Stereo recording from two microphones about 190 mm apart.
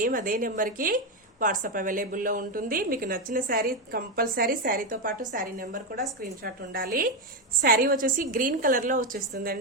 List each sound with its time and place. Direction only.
0.0 s a woman's voice: 45° right (ahead or behind)